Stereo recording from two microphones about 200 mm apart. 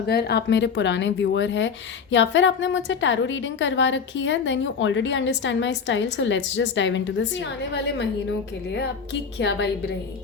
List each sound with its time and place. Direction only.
0.1 s speech: 55° left (ahead or behind)
9.4 s speech: 55° left (ahead or behind)